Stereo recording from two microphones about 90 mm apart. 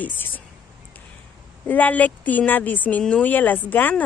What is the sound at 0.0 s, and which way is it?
Speech, 20° left (ahead or behind).